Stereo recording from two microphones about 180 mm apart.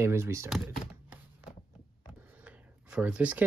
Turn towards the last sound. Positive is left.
turn(degrees=-10)  # may be behind; listen again after turning